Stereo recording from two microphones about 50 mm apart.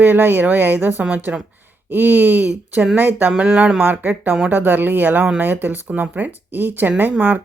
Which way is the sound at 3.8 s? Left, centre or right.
Right.